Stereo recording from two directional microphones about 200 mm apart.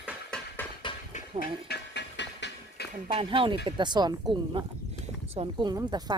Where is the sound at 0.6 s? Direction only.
10° left (ahead or behind).